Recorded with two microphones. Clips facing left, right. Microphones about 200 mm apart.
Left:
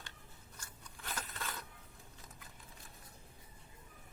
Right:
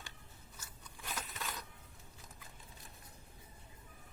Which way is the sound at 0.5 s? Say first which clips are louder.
Even; 5° right (ahead or behind).